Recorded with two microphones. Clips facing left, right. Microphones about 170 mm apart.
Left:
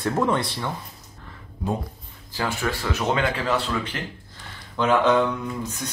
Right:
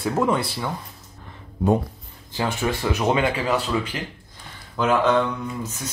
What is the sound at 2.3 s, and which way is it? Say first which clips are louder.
Speech: right 2 dB; 20° right (ahead or behind).